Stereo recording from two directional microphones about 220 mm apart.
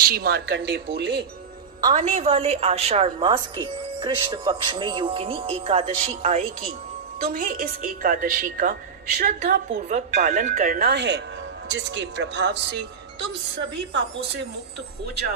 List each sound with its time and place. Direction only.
0.0 s a woman's voice: 45° right (ahead or behind)
2.0 s a woman's voice: 30° right (ahead or behind)
7.2 s a woman's voice: 40° right (ahead or behind)